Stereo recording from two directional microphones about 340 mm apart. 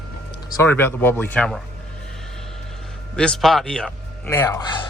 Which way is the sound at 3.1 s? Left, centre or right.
Centre.